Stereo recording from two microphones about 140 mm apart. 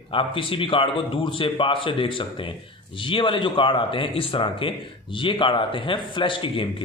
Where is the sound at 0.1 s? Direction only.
40° left (ahead or behind).